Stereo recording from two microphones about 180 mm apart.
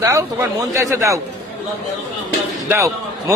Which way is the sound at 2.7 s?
15° right (ahead or behind).